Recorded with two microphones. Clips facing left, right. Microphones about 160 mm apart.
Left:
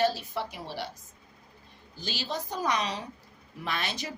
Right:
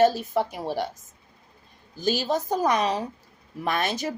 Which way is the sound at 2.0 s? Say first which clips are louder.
Right 10 dB; 45° right (ahead or behind).